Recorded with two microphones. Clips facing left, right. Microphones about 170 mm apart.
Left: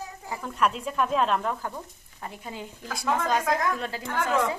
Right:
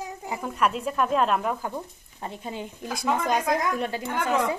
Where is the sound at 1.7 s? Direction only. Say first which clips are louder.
Right 5 dB; 25° right (ahead or behind).